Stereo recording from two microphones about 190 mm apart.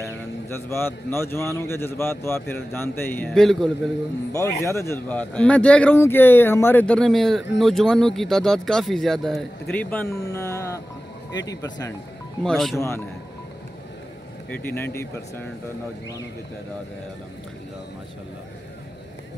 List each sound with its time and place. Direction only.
0.5 s a man's voice: 15° left (ahead or behind)
4.3 s a man's voice: 15° left (ahead or behind)
12.4 s speech: centre (ahead or behind)
12.7 s a man's voice: 15° left (ahead or behind)
14.5 s a man's voice: 10° left (ahead or behind)